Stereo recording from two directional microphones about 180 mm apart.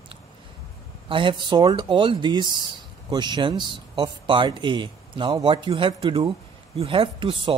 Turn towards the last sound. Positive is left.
turn(degrees=-25)  # may be behind; listen again after turning